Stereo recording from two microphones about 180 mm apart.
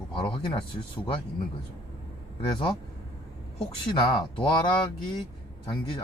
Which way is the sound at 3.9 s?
25° left (ahead or behind).